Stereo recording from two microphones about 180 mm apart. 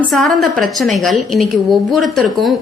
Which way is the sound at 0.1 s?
Centre (ahead or behind).